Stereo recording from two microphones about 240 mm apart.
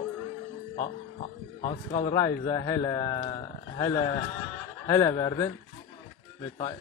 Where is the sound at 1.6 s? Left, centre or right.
Centre.